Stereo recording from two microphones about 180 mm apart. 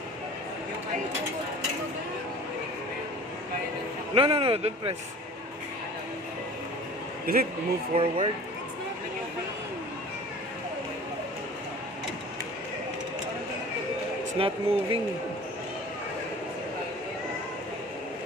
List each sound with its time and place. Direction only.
4.1 s speech: 30° right (ahead or behind)
7.3 s a man's voice: 55° right (ahead or behind)
7.9 s speech: 30° right (ahead or behind)
14.3 s speech: 30° right (ahead or behind)